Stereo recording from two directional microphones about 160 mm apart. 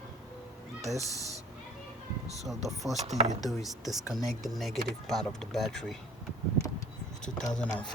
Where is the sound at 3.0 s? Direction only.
45° right (ahead or behind).